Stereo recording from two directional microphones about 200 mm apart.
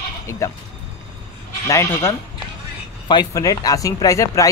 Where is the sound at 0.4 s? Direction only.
15° left (ahead or behind).